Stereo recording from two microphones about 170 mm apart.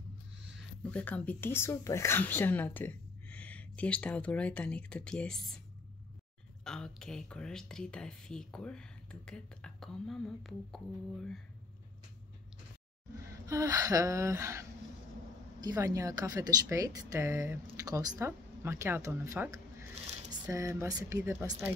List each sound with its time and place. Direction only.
0.8 s speech: 10° left (ahead or behind)
6.6 s speech: 5° left (ahead or behind)
13.5 s speech: 20° right (ahead or behind)